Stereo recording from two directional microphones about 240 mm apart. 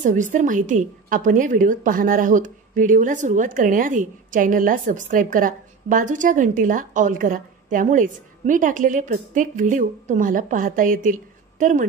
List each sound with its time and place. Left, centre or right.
0.0 s a woman's voice: right